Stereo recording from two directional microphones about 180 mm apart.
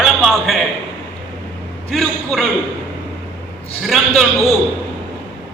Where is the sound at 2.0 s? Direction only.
Centre (ahead or behind).